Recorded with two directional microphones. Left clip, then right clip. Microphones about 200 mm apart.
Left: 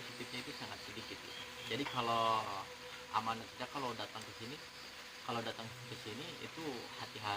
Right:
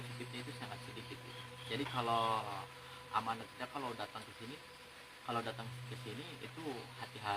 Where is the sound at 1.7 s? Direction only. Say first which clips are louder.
Even; 15° right (ahead or behind).